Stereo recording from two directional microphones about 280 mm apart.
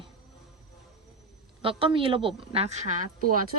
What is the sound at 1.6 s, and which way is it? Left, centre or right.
Speech, centre.